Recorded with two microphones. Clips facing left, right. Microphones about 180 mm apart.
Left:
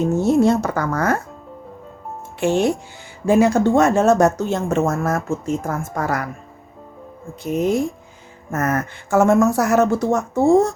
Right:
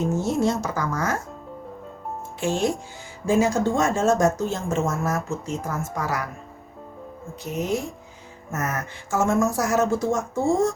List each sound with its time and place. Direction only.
0.0 s speech: 60° left (ahead or behind)
2.4 s speech: 65° left (ahead or behind)
7.4 s speech: 55° left (ahead or behind)